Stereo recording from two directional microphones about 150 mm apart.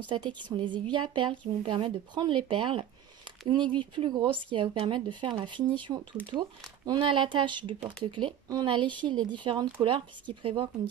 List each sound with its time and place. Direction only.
0.0 s speech: 30° right (ahead or behind)
6.2 s speech: 10° left (ahead or behind)
6.9 s speech: 35° right (ahead or behind)